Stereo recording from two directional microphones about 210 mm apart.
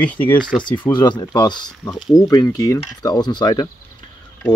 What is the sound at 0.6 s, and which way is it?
Speech, 20° left (ahead or behind).